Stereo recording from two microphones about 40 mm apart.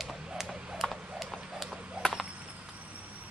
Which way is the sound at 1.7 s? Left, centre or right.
Right.